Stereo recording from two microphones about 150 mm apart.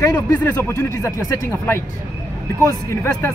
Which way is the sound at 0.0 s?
15° left (ahead or behind).